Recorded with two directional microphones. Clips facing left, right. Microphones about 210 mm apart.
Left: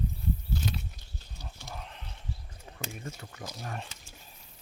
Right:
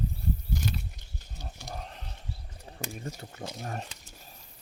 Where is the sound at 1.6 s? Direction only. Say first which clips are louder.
Right 3 dB; 40° right (ahead or behind).